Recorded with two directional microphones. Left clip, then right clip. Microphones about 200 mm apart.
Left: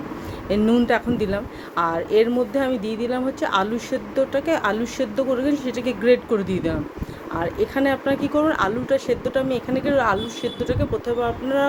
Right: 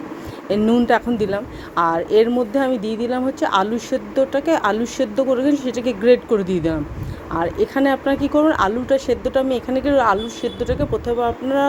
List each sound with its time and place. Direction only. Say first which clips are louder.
0.4 s speech: right 2 dB; 15° right (ahead or behind)